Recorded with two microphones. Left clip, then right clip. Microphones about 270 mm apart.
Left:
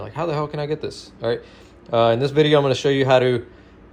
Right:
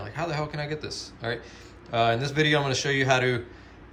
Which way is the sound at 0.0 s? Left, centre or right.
Centre.